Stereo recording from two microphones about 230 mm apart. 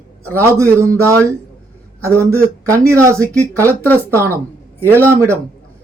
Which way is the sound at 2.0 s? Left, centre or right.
Centre.